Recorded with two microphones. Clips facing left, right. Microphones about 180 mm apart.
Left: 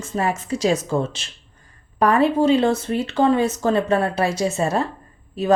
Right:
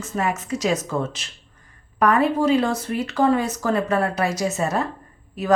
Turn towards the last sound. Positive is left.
turn(degrees=30)  # may be behind; listen again after turning